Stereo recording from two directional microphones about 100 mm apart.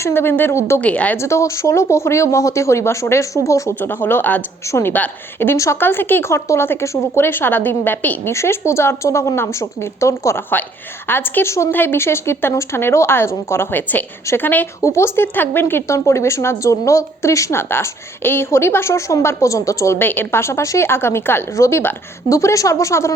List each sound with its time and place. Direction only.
0.0 s speech: 20° left (ahead or behind)
0.8 s a woman's voice: 15° left (ahead or behind)
1.2 s speech: 30° left (ahead or behind)
3.8 s speech: 20° left (ahead or behind)